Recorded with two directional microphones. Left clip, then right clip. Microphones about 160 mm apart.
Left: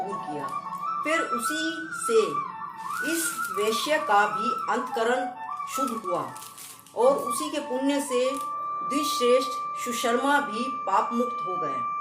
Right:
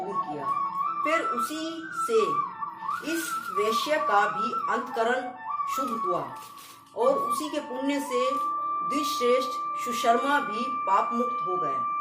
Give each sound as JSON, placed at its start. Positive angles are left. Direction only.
{"t": 1.0, "sound": "speech", "side_deg": 20}
{"t": 3.6, "sound": "speech", "side_deg": 25}
{"t": 7.3, "sound": "speech", "side_deg": 25}